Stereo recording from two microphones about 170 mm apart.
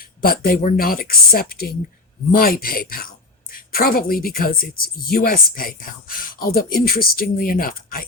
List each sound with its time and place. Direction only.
0.2 s speech: 60° left (ahead or behind)